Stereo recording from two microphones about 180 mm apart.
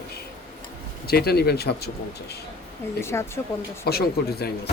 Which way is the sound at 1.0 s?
60° left (ahead or behind).